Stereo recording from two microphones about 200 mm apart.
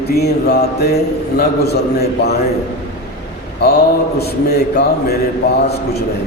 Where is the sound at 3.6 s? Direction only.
50° left (ahead or behind).